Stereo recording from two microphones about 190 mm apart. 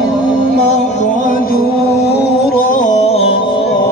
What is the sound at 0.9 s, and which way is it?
Music, 40° left (ahead or behind).